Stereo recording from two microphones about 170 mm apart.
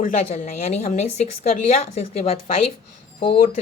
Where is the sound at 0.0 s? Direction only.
50° left (ahead or behind).